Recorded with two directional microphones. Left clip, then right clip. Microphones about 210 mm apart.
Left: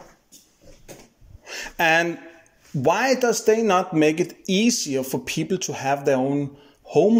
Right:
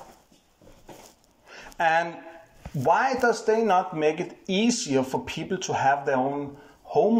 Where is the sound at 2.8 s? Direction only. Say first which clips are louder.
Left 2 dB; 50° left (ahead or behind).